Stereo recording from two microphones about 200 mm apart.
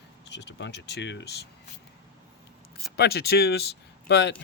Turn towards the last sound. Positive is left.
turn(degrees=55)  # may be behind; listen again after turning